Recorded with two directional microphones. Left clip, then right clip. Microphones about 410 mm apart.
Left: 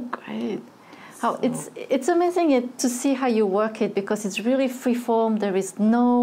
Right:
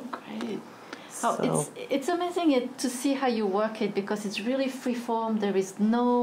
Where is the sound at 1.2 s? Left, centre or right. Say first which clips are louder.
Left 2 dB; left.